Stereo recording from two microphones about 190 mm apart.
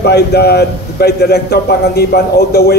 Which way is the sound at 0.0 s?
55° left (ahead or behind).